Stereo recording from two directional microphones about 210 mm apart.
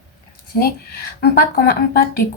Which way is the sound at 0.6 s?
45° left (ahead or behind).